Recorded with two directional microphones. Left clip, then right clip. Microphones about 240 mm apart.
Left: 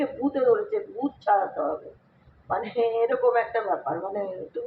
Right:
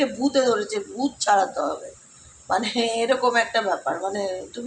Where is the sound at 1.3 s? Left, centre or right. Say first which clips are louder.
Right 3 dB; right.